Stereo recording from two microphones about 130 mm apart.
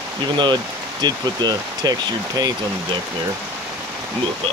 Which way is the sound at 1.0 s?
30° right (ahead or behind).